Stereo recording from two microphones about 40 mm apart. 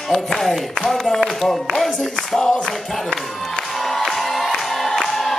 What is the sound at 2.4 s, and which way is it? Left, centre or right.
Music, centre.